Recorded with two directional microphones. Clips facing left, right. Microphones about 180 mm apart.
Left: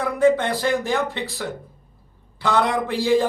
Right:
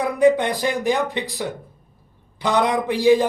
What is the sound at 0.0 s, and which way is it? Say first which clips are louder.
Speech: right 2 dB; 15° right (ahead or behind).